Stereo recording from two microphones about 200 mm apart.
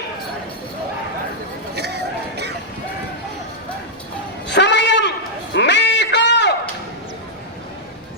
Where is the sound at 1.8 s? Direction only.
55° right (ahead or behind).